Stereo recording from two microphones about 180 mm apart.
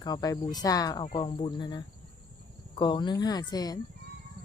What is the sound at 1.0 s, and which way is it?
A woman's voice, 30° left (ahead or behind).